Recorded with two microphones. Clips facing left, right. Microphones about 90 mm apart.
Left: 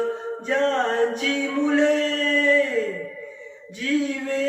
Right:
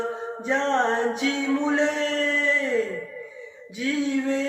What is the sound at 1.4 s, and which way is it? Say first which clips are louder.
Male singing: left 4 dB; 20° right (ahead or behind).